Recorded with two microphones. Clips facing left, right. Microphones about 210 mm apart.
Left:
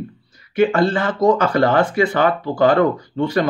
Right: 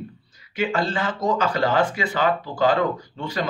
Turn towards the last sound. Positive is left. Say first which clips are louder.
# left 9 dB
turn(degrees=60)  # may be behind; listen again after turning